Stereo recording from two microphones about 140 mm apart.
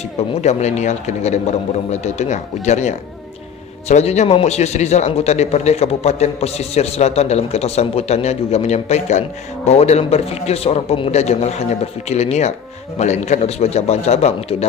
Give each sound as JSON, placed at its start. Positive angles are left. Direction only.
{"t": 0.4, "sound": "a man's voice", "side_deg": 55}